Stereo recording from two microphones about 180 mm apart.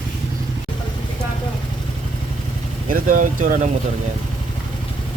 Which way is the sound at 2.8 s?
50° right (ahead or behind).